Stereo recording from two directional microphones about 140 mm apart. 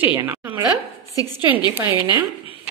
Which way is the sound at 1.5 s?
35° left (ahead or behind).